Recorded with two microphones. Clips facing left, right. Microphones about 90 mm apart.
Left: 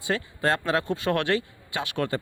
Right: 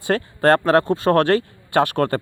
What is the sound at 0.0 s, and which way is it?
Speech, 55° right (ahead or behind).